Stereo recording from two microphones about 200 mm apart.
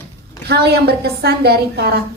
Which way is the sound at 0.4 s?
55° right (ahead or behind).